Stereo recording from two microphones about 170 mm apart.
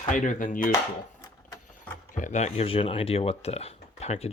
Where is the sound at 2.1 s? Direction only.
45° left (ahead or behind).